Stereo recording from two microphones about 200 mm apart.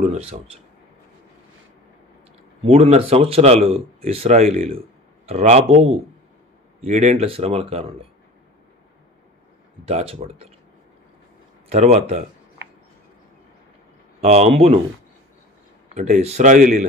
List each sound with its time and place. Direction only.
0.0 s speech: 35° right (ahead or behind)
2.6 s speech: 30° right (ahead or behind)
9.8 s speech: 30° right (ahead or behind)
11.7 s speech: 30° right (ahead or behind)
14.2 s speech: 35° right (ahead or behind)
15.9 s speech: 35° right (ahead or behind)